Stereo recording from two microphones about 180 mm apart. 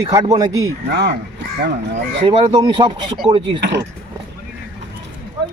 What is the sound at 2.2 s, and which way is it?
Speech, 25° right (ahead or behind).